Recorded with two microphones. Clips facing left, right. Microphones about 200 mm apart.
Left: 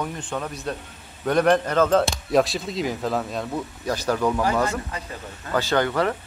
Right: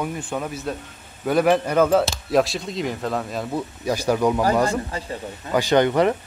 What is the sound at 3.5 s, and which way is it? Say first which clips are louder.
Speech: right 2 dB; 10° right (ahead or behind).